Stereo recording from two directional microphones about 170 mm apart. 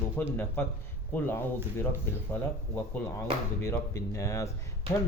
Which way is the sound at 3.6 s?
15° left (ahead or behind).